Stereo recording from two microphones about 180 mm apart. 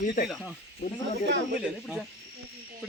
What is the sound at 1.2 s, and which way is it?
Speech, 75° right (ahead or behind).